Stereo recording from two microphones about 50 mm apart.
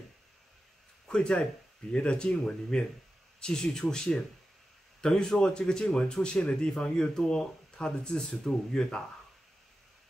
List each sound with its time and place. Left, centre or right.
1.0 s speech: centre